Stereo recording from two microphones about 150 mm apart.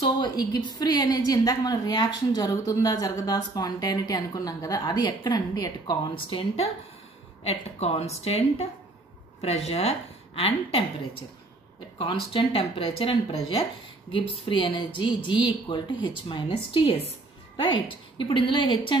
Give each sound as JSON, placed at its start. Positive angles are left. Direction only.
{"t": 0.0, "sound": "speech", "side_deg": 30}
{"t": 6.3, "sound": "a woman's voice", "side_deg": 40}
{"t": 12.0, "sound": "speech", "side_deg": 35}